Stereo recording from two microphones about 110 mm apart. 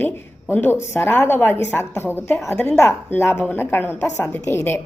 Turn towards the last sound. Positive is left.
turn(degrees=20)  # may be behind; listen again after turning